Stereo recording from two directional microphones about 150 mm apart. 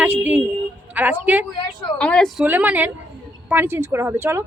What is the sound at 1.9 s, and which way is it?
Speech, 5° left (ahead or behind).